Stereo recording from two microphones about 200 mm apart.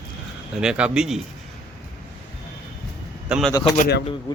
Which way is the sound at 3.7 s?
55° left (ahead or behind).